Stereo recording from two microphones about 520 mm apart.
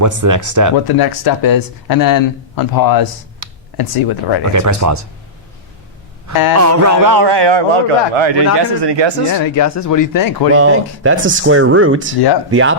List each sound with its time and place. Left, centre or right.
0.0 s speech: right
0.9 s speech: left
3.4 s computer keyboard: right
3.8 s speech: left
4.5 s speech: right
6.3 s speech: left
6.6 s a man's voice: right
8.5 s a man's voice: right
9.4 s speech: left
10.5 s speech: right